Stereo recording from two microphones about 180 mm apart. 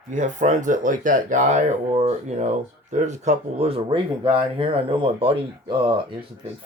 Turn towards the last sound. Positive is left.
turn(degrees=-30)  # may be behind; listen again after turning